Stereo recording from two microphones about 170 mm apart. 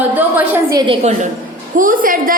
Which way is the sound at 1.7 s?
55° right (ahead or behind).